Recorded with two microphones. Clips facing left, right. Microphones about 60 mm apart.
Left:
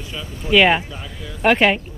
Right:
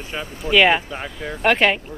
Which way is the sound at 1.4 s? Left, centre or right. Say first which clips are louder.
Left 2 dB; centre.